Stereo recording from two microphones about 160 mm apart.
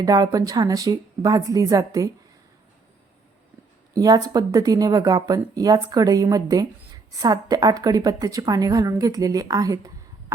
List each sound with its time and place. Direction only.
0.0 s speech: 25° right (ahead or behind)
3.9 s speech: 20° right (ahead or behind)